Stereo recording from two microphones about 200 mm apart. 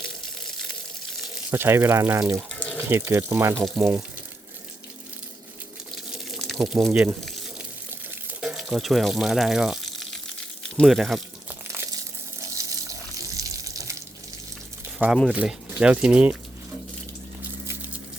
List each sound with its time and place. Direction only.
0.0 s water: 5° left (ahead or behind)
2.7 s speech: 10° right (ahead or behind)
5.9 s water: centre (ahead or behind)
8.4 s water: centre (ahead or behind)
11.7 s crumpling: 15° right (ahead or behind)
12.4 s water: 15° right (ahead or behind)
14.9 s speech: centre (ahead or behind)
17.7 s a sound: 10° right (ahead or behind)